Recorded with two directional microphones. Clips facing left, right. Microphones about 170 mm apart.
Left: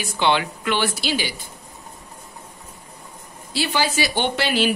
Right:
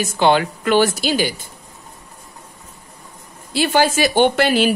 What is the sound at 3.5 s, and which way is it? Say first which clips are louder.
A woman's voice: right 6 dB; 50° right (ahead or behind).